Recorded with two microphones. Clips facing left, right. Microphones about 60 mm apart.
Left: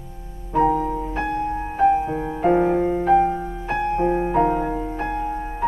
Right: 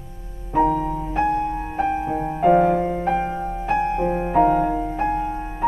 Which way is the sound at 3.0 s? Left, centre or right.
Centre.